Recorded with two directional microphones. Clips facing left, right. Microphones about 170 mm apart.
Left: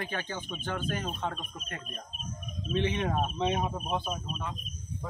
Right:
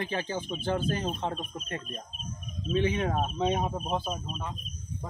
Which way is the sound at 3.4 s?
35° right (ahead or behind).